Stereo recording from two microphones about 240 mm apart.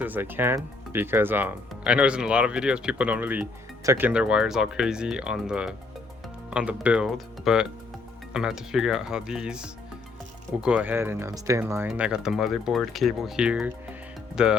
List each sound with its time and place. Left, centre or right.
0.0 s speech: centre